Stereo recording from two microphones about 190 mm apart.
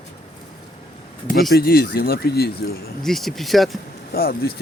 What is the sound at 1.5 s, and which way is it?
Speech, 55° left (ahead or behind).